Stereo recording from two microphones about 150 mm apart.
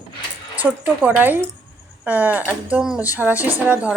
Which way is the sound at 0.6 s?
10° right (ahead or behind).